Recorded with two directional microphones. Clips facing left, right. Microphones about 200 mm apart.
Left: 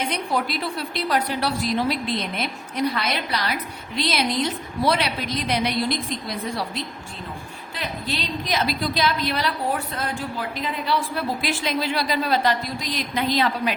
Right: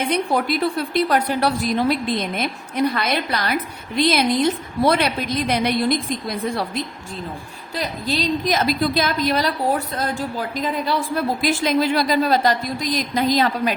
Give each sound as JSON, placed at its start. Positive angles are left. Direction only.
{"t": 0.1, "sound": "a woman's voice", "side_deg": -50}
{"t": 7.8, "sound": "a woman's voice", "side_deg": -40}